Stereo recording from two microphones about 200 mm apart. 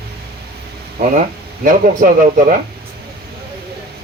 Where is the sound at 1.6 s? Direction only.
40° right (ahead or behind).